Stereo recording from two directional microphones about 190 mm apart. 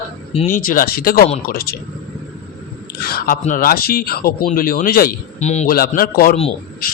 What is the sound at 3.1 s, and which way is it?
Speech, 45° left (ahead or behind).